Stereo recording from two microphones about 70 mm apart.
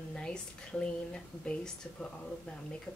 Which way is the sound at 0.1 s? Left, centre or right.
Centre.